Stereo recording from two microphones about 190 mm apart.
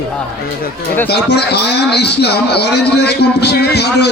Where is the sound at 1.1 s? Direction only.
60° left (ahead or behind).